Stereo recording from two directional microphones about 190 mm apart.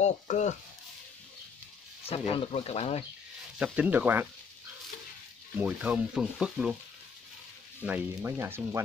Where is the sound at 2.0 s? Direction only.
30° left (ahead or behind).